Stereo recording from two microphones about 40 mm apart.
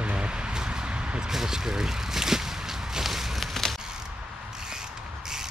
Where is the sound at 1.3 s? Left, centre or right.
Centre.